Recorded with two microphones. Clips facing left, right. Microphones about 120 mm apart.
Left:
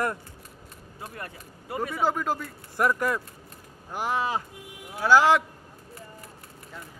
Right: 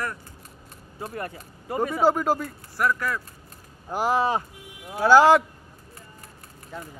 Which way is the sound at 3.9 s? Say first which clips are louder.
Right 5 dB; 35° right (ahead or behind).